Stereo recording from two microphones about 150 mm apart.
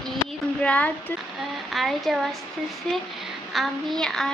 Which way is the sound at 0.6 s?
10° left (ahead or behind).